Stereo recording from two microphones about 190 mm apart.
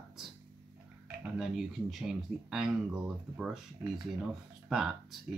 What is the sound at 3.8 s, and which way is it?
Speech, 15° right (ahead or behind).